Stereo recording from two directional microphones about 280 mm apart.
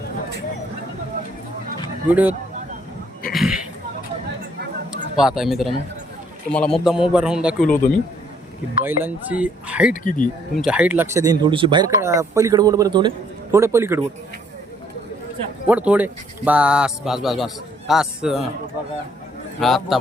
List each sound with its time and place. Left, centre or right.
2.0 s speech: centre
3.3 s a sound: centre
5.1 s speech: centre
8.8 s speech: centre
9.9 s speech: left
10.5 s speech: centre
15.6 s speech: centre
19.5 s speech: centre